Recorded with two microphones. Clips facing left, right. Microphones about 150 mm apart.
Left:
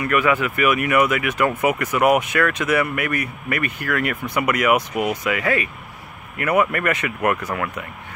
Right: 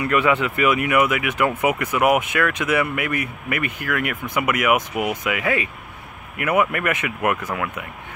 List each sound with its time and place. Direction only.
0.1 s speech: 20° right (ahead or behind)